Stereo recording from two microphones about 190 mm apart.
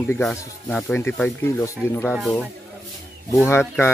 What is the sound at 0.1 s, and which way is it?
Speech, 10° left (ahead or behind).